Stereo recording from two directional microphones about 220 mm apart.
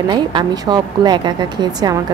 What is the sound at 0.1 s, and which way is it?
A woman's voice, 20° right (ahead or behind).